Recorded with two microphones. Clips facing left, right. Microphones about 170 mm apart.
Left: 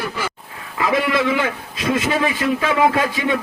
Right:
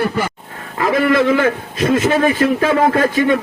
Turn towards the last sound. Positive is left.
turn(degrees=-50)  # may be behind; listen again after turning